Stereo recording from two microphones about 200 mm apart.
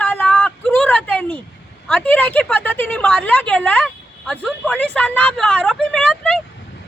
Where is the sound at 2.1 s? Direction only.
10° left (ahead or behind).